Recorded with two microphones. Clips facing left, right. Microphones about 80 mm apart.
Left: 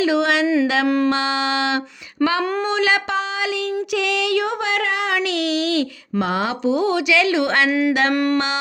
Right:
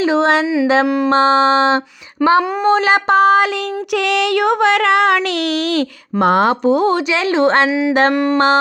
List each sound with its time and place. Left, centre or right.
0.0 s speech: right
0.4 s music: centre
1.1 s speech: right
3.9 s a sound: right
5.7 s speech: right
7.7 s music: centre
8.1 s a sound: right